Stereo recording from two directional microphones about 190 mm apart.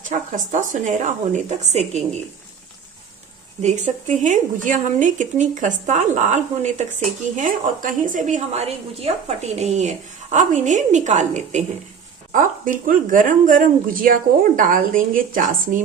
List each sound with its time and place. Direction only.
0.0 s speech: 45° right (ahead or behind)
3.6 s a woman's voice: 40° right (ahead or behind)